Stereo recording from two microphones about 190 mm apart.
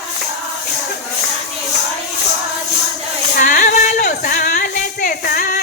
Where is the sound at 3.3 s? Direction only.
45° left (ahead or behind).